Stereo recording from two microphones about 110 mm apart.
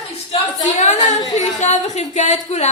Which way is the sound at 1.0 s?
90° left.